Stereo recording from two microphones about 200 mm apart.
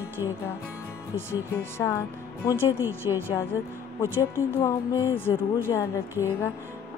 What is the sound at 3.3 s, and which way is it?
Speech, 10° left (ahead or behind).